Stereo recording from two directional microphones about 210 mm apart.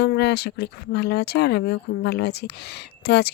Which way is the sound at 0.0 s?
55° left (ahead or behind).